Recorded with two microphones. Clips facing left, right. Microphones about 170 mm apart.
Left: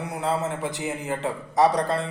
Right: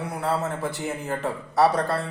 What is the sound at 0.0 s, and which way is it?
A man's voice, 20° left (ahead or behind).